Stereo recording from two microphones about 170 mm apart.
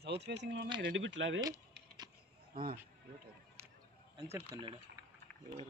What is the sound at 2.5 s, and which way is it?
Speech, 55° right (ahead or behind).